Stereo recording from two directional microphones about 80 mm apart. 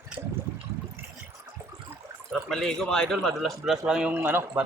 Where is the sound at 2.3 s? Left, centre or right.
Centre.